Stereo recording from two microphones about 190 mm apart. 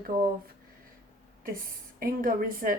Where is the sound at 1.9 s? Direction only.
50° right (ahead or behind).